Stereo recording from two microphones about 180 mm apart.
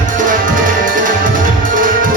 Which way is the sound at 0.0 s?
45° right (ahead or behind).